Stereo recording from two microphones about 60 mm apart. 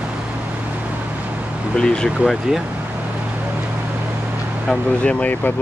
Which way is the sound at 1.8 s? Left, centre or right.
Centre.